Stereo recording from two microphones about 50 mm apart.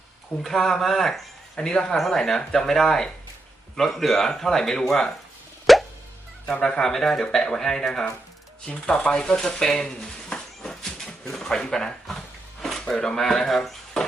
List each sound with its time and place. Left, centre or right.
0.4 s speech: centre
1.5 s speech: centre
5.7 s music: centre
6.5 s speech: centre